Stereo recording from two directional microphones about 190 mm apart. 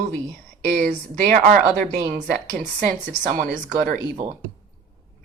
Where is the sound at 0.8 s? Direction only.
40° right (ahead or behind).